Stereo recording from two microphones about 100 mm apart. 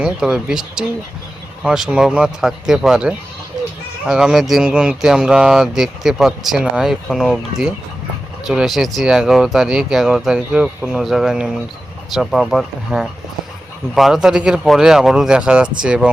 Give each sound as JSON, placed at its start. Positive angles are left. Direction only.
{"t": 0.0, "sound": "speech", "side_deg": -5}